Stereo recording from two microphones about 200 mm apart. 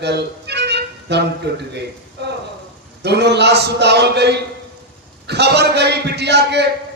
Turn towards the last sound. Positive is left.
turn(degrees=-55)  # may be behind; listen again after turning